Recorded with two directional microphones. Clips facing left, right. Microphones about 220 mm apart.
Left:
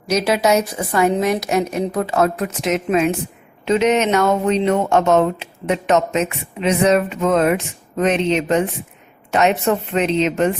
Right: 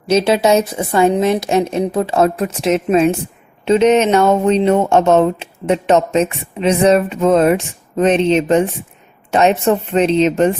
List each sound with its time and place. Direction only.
0.1 s a woman's voice: 30° right (ahead or behind)